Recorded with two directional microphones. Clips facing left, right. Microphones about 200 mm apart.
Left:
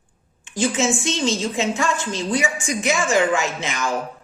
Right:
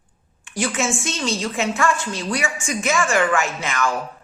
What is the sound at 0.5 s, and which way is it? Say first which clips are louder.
A woman's voice: left 3 dB; 20° left (ahead or behind).